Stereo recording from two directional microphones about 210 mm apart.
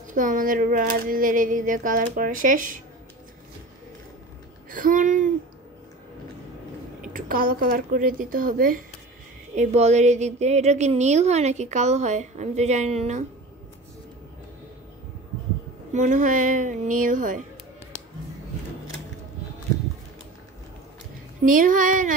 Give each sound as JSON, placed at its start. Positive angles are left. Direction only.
{"t": 0.0, "sound": "a woman's voice", "side_deg": -40}
{"t": 4.6, "sound": "a woman's voice", "side_deg": -40}
{"t": 7.2, "sound": "a woman's voice", "side_deg": -45}
{"t": 15.9, "sound": "a woman's voice", "side_deg": -35}
{"t": 21.5, "sound": "a woman's voice", "side_deg": -40}